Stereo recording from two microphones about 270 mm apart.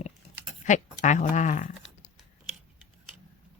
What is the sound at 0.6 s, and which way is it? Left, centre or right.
Speech, left.